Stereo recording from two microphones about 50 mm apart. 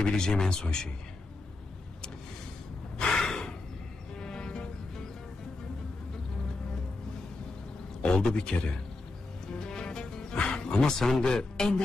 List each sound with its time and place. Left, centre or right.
0.0 s speech: centre
3.0 s gasp: centre
4.2 s vehicle: centre
8.0 s speech: centre
9.6 s music: centre